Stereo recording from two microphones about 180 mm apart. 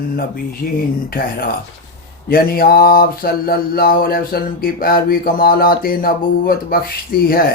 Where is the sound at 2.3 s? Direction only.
55° left (ahead or behind).